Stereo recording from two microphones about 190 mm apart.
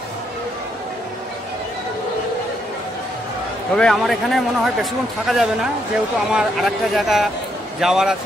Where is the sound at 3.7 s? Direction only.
5° left (ahead or behind).